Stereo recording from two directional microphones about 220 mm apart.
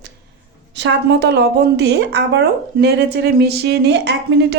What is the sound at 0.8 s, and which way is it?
A woman's voice, 50° right (ahead or behind).